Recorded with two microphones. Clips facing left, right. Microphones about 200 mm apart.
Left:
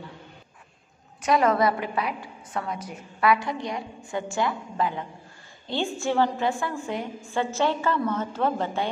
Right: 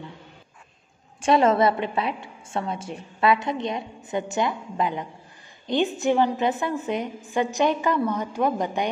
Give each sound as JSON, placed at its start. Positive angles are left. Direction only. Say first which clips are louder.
{"t": 1.2, "sound": "a woman's voice", "louder": "right 3 dB", "side_deg": -25}